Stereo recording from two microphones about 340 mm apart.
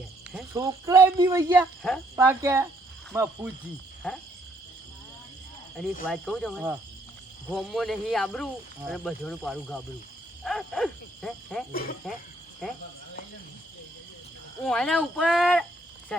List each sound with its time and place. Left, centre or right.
0.3 s speech: centre
6.1 s speech: centre
11.7 s speech: left
14.6 s speech: centre